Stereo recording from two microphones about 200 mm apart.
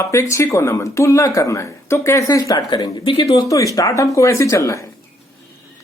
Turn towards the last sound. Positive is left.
turn(degrees=15)  # may be behind; listen again after turning